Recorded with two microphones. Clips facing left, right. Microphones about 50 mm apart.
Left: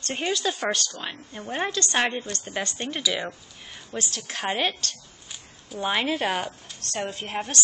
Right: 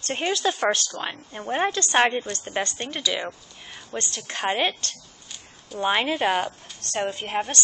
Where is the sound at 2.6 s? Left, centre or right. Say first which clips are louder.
Even; centre.